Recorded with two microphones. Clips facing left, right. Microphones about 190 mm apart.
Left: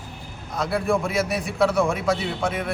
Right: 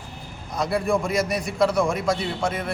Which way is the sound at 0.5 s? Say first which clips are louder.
Even; centre (ahead or behind).